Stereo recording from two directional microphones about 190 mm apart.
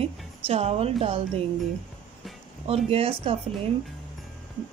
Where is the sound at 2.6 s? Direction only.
30° right (ahead or behind).